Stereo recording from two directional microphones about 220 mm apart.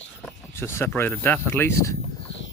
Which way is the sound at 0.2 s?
10° left (ahead or behind).